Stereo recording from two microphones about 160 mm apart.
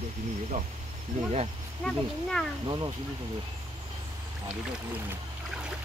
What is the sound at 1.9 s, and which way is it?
Speech, 5° left (ahead or behind).